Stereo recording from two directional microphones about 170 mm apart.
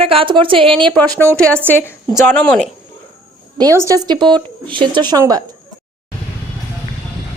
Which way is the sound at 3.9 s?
25° right (ahead or behind).